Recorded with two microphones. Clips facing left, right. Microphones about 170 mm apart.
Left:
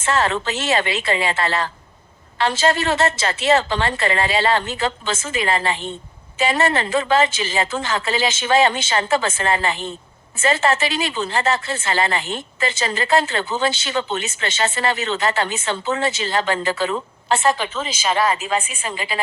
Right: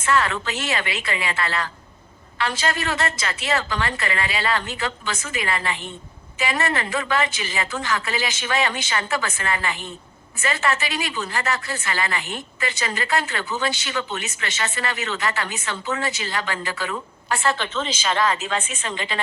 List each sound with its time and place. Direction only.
0.0 s a woman's voice: 25° left (ahead or behind); by 19.2 s 5° left (ahead or behind)